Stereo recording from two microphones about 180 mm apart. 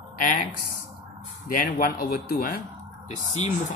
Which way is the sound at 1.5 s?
50° left (ahead or behind).